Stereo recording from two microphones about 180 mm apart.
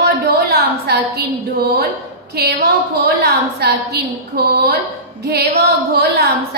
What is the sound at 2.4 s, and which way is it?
A woman's voice, 60° right (ahead or behind).